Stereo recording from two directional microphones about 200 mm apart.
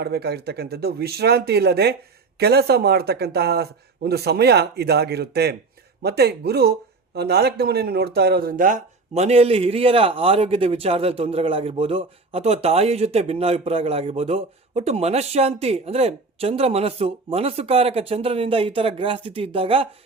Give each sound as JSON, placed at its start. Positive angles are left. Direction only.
{"t": 0.0, "sound": "speech", "side_deg": -55}